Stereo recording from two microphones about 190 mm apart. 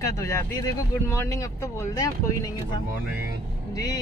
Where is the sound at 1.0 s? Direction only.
15° left (ahead or behind).